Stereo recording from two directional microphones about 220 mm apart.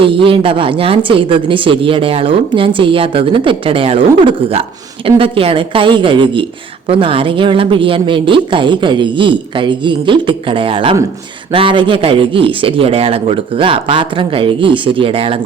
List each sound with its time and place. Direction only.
0.0 s a woman's voice: 25° right (ahead or behind)